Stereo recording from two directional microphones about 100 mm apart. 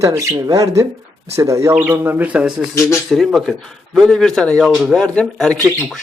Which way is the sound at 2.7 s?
25° left (ahead or behind).